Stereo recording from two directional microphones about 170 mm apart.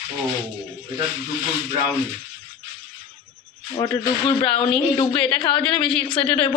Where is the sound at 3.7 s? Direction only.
25° left (ahead or behind).